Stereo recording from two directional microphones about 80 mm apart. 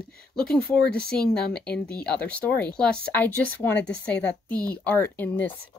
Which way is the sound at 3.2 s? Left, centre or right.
Left.